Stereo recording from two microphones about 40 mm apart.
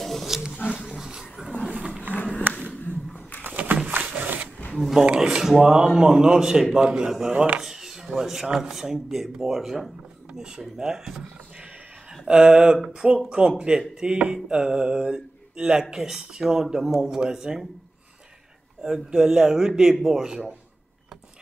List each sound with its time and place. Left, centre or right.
0.0 s wild animals: centre
0.3 s wild animals: centre
0.7 s roaring cats: centre
1.7 s roaring cats: right
2.5 s a sound: right
4.7 s speech: centre
5.0 s speech: centre
7.1 s speech: centre
7.6 s a sound: centre
8.2 s speech: centre
12.3 s speech: right
18.8 s speech: centre